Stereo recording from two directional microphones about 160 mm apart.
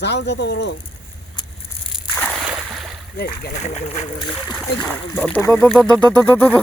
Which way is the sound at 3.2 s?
75° left (ahead or behind).